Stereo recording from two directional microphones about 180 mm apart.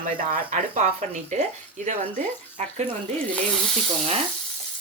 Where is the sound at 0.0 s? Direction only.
55° right (ahead or behind).